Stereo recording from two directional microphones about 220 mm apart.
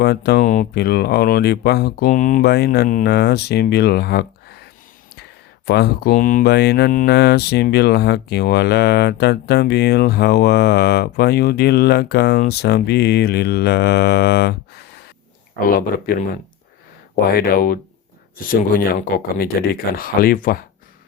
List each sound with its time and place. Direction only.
0.0 s speech: 45° left (ahead or behind)
5.6 s speech: 50° left (ahead or behind)
15.6 s speech: 40° left (ahead or behind)
17.3 s speech: 45° left (ahead or behind)
18.9 s speech: 40° left (ahead or behind)